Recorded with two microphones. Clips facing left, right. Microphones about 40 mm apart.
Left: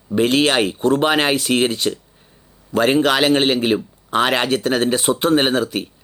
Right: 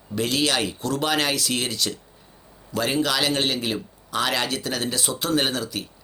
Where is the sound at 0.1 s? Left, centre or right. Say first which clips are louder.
Left 7 dB; left.